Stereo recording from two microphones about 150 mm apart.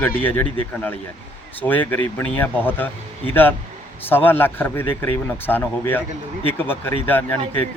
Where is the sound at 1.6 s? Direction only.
10° left (ahead or behind).